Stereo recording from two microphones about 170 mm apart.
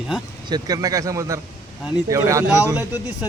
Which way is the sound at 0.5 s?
20° right (ahead or behind).